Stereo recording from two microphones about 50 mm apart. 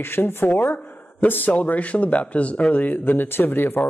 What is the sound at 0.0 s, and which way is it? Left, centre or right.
Speech, left.